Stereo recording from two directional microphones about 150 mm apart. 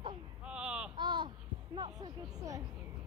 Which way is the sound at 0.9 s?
30° right (ahead or behind).